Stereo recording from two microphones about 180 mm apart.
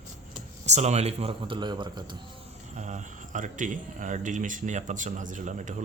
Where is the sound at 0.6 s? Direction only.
40° right (ahead or behind).